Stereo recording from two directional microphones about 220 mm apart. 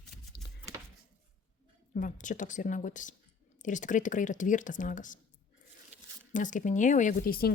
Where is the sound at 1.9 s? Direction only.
35° left (ahead or behind).